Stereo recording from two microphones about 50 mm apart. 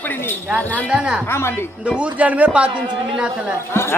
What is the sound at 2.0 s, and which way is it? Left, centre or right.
Speech, right.